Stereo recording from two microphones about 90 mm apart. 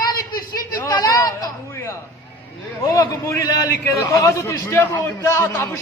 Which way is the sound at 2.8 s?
35° left (ahead or behind).